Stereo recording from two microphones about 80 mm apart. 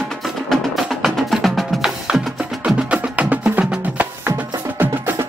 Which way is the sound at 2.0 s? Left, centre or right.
Centre.